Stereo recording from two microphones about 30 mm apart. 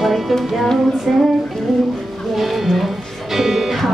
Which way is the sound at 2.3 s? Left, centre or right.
Centre.